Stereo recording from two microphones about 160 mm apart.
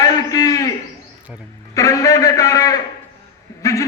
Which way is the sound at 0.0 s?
20° left (ahead or behind).